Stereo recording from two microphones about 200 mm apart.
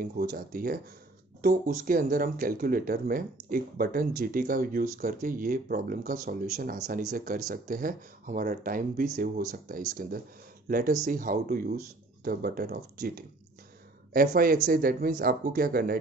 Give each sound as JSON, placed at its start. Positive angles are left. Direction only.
{"t": 0.0, "sound": "speech", "side_deg": -45}